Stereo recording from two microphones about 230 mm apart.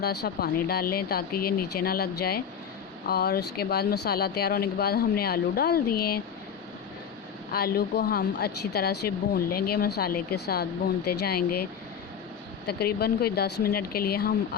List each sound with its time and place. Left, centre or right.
0.0 s speech: left
7.5 s speech: left
12.6 s speech: left